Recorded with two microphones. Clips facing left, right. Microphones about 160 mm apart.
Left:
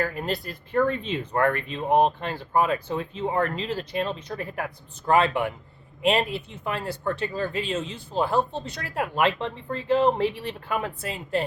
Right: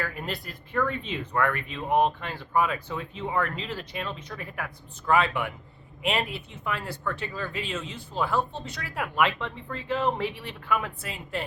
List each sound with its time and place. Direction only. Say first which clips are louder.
0.0 s speech: left 6 dB; 35° left (ahead or behind)